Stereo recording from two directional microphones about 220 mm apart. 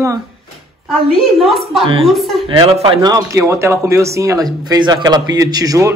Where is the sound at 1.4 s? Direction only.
Centre (ahead or behind).